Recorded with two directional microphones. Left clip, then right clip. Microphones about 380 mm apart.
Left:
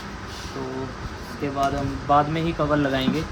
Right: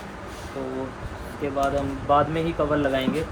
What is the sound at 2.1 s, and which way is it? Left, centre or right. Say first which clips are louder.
Speech: left 1 dB; centre.